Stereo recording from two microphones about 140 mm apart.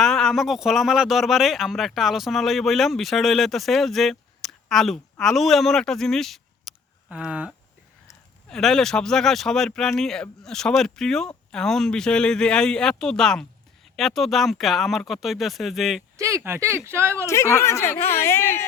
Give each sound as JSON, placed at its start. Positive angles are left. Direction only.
{"t": 0.0, "sound": "a man's voice", "side_deg": 5}
{"t": 8.4, "sound": "speech", "side_deg": 5}
{"t": 16.1, "sound": "speech", "side_deg": -20}
{"t": 17.2, "sound": "speech", "side_deg": 20}